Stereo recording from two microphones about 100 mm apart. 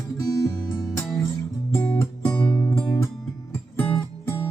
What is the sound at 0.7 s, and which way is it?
Music, 30° left (ahead or behind).